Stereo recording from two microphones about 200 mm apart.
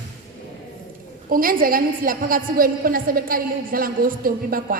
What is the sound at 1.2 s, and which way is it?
A woman's voice, 45° right (ahead or behind).